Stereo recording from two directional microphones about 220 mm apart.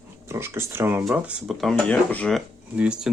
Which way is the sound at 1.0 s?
Centre (ahead or behind).